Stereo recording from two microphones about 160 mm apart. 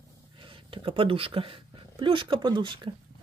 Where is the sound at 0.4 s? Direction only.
30° right (ahead or behind).